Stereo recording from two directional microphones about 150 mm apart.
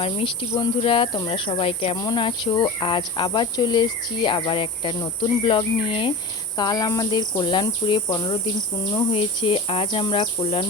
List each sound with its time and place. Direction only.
0.0 s speech: 35° left (ahead or behind)